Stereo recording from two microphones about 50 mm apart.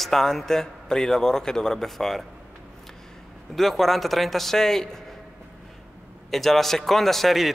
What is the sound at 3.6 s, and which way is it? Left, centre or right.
A man's voice, centre.